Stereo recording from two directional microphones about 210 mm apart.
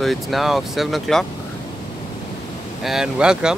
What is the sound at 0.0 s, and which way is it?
Speech, centre (ahead or behind).